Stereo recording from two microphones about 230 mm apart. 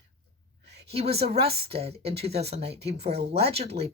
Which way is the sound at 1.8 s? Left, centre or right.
Right.